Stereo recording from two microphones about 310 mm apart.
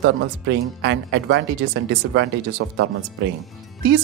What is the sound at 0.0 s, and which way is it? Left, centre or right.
Speech, right.